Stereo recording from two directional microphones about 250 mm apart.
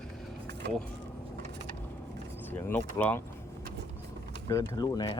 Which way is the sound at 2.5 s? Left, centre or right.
Centre.